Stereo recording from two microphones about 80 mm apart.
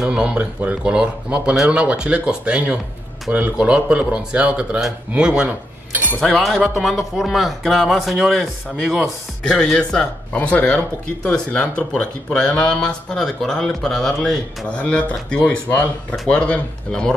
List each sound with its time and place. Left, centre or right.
0.0 s speech: centre
14.8 s speech: centre